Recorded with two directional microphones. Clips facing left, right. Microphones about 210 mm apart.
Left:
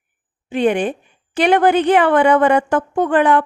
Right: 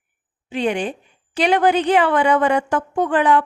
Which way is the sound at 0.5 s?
55° left (ahead or behind).